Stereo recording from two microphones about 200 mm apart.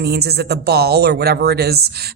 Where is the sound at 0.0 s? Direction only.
55° right (ahead or behind).